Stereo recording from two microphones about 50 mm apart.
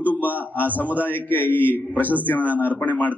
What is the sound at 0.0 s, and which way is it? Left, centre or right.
A man's voice, left.